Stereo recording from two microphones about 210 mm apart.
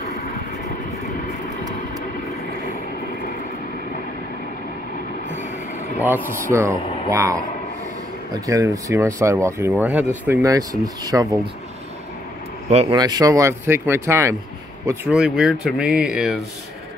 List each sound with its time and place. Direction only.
5.9 s speech: 10° right (ahead or behind)
8.5 s speech: 15° right (ahead or behind)
12.6 s speech: 30° right (ahead or behind)
13.0 s speech: 15° right (ahead or behind)